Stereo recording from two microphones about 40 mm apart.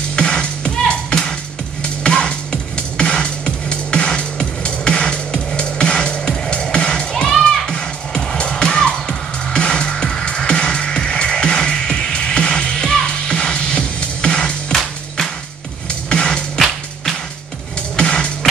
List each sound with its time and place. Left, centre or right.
0.1 s music: left
7.3 s music: centre
8.4 s music: left
10.2 s music: left
16.1 s music: left
17.9 s music: left